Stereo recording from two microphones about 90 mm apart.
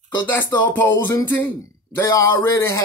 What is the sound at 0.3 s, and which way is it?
Speech, 30° left (ahead or behind).